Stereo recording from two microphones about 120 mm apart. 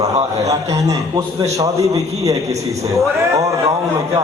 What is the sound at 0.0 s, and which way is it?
A man's voice, 30° right (ahead or behind).